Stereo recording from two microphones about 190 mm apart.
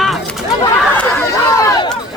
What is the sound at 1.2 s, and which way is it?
Speech, 15° left (ahead or behind).